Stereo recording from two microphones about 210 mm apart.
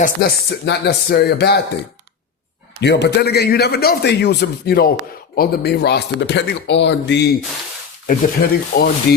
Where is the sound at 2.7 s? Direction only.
55° left (ahead or behind).